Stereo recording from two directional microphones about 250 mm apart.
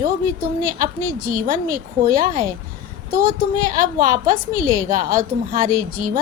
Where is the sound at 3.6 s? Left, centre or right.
Right.